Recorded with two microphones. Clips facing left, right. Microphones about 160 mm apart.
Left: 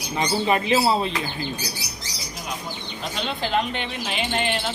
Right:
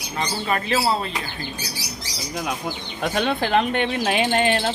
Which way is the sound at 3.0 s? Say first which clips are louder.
Right 6 dB; 55° right (ahead or behind).